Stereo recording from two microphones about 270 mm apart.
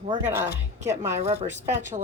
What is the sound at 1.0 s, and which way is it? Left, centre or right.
Speech, right.